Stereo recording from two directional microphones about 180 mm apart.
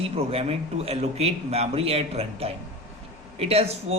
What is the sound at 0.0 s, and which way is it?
A man's voice, 35° right (ahead or behind).